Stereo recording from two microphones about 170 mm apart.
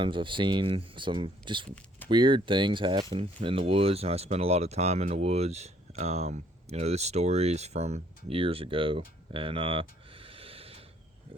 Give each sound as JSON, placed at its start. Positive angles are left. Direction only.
{"t": 0.0, "sound": "speech", "side_deg": -30}